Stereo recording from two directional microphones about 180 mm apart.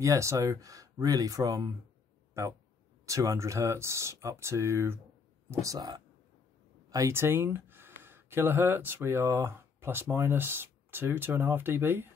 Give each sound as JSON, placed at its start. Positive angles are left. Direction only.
{"t": 0.0, "sound": "speech", "side_deg": -15}